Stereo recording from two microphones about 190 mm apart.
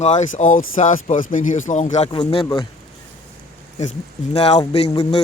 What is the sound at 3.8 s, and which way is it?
Speech, 35° left (ahead or behind).